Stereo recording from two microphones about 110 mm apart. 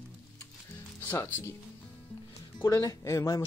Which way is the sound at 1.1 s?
15° left (ahead or behind).